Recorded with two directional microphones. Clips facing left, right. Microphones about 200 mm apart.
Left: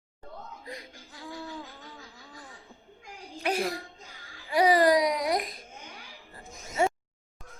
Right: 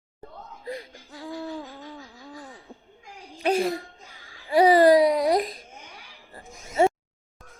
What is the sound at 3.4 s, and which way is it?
Speech, 25° right (ahead or behind).